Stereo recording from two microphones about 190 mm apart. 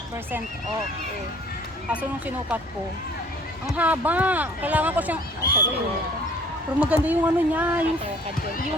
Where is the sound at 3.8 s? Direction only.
10° right (ahead or behind).